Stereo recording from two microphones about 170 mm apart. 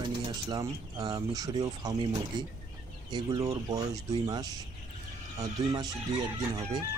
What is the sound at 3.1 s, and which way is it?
Speech, 25° right (ahead or behind).